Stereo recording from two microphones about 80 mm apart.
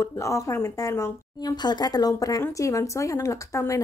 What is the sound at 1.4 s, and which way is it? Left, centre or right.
Speech, left.